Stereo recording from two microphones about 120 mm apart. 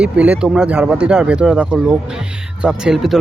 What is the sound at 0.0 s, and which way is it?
Speech, 10° right (ahead or behind).